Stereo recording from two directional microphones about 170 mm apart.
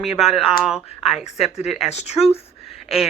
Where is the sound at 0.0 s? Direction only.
Centre (ahead or behind).